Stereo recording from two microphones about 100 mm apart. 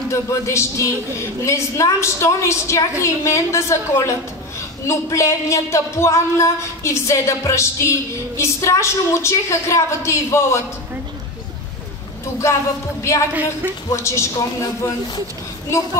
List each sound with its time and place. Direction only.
0.1 s speech: 30° left (ahead or behind)
13.3 s a woman's voice: 15° right (ahead or behind)
13.8 s speech: 30° left (ahead or behind)